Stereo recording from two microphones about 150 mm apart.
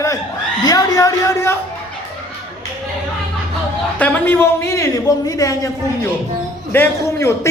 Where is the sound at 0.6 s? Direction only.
25° left (ahead or behind).